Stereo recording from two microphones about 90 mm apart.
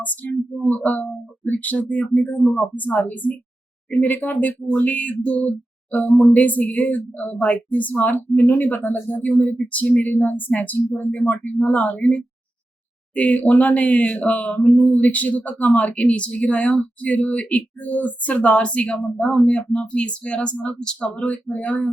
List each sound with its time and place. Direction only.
0.6 s speech: 15° left (ahead or behind)